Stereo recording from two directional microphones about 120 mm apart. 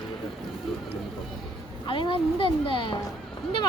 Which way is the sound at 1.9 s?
45° left (ahead or behind).